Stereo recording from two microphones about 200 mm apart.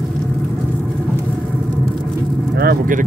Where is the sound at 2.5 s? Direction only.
45° right (ahead or behind).